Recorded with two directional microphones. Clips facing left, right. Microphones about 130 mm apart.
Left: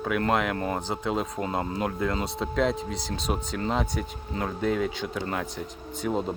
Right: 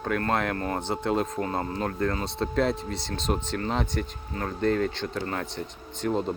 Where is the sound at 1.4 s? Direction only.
15° left (ahead or behind).